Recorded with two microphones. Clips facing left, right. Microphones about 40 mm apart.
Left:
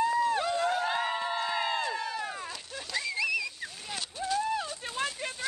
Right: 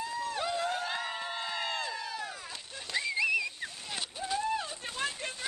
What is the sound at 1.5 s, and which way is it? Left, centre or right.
Crowd, centre.